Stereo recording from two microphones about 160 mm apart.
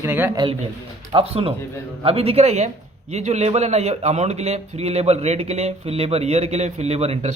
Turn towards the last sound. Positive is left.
turn(degrees=-40)  # may be behind; listen again after turning